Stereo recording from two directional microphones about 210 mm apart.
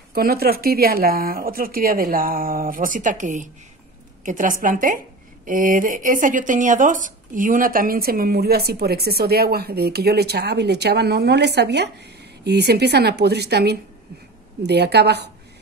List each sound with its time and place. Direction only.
0.1 s speech: 45° right (ahead or behind)